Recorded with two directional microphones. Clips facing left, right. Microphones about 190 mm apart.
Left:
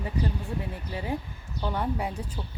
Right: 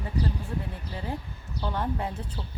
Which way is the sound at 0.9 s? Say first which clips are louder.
Left 4 dB; 15° left (ahead or behind).